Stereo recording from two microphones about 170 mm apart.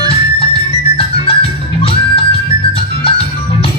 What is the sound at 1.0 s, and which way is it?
Music, 35° left (ahead or behind).